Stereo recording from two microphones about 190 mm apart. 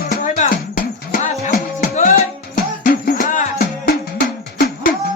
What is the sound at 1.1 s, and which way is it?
Music, 55° left (ahead or behind).